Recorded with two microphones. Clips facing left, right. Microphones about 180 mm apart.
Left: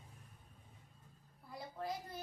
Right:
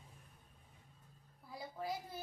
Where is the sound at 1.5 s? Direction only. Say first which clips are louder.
Even; centre (ahead or behind).